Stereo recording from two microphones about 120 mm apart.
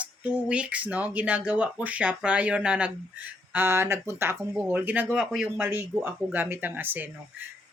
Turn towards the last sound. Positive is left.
turn(degrees=-15)  # may be behind; listen again after turning